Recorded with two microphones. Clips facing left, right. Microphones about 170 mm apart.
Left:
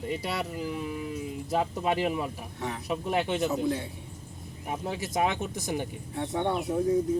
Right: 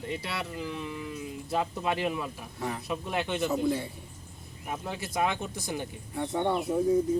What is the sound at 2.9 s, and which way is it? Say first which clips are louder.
Speech: left 5 dB; 10° left (ahead or behind).